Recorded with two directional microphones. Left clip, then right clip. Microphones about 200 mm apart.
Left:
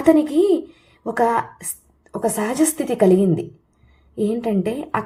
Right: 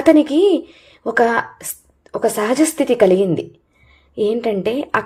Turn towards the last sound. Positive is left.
turn(degrees=-20)  # may be behind; listen again after turning